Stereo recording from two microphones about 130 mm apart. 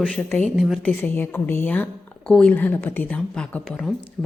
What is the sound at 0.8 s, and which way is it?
A woman's voice, 15° left (ahead or behind).